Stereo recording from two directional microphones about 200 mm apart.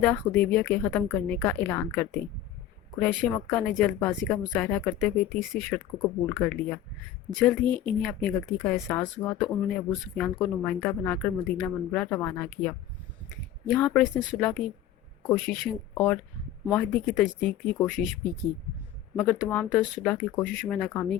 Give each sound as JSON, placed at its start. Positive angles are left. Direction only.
{"t": 0.0, "sound": "a woman's voice", "side_deg": 5}
{"t": 13.7, "sound": "a woman's voice", "side_deg": 5}